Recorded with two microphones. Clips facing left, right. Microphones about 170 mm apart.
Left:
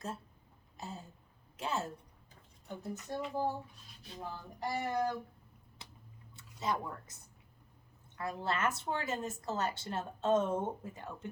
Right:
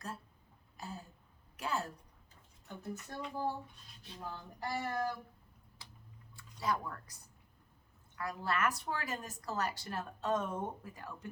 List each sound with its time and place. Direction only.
0.8 s a sound: 25° left (ahead or behind)
3.8 s dishes: centre (ahead or behind)
4.6 s speech: 20° left (ahead or behind)
6.3 s speech: 20° left (ahead or behind)
8.2 s speech: 25° left (ahead or behind)